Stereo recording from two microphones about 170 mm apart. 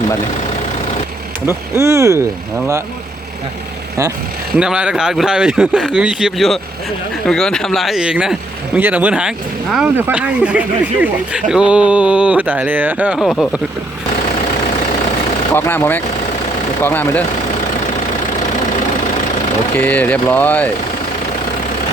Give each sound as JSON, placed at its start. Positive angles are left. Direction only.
{"t": 1.5, "sound": "speech", "side_deg": -15}
{"t": 4.5, "sound": "speech", "side_deg": -5}
{"t": 15.5, "sound": "speech", "side_deg": 15}
{"t": 19.7, "sound": "speech", "side_deg": 10}